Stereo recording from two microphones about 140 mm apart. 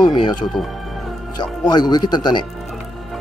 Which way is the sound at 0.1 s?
35° left (ahead or behind).